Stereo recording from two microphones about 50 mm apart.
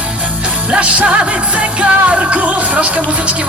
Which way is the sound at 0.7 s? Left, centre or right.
Right.